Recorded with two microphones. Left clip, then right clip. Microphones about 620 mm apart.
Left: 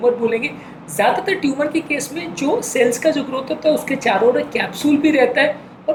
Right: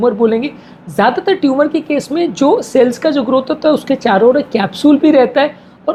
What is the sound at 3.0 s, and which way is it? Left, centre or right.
A woman's voice, right.